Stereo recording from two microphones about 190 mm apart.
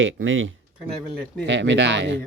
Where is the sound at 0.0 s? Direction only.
90° right.